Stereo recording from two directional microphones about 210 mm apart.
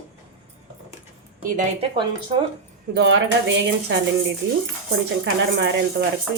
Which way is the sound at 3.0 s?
60° right (ahead or behind).